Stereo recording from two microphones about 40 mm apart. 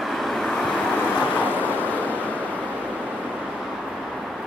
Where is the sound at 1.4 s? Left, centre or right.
Left.